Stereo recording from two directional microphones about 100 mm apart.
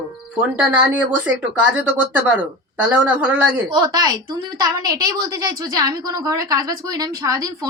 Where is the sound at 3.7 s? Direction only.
40° right (ahead or behind).